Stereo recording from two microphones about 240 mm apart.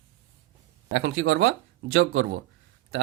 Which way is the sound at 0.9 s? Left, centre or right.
Right.